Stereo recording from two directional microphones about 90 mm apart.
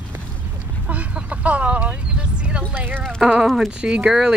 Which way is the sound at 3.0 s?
10° left (ahead or behind).